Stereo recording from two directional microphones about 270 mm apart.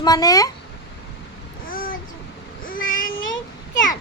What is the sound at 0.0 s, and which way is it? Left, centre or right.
Speech, centre.